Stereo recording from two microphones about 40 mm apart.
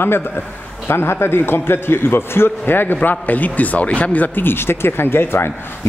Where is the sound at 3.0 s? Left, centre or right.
Left.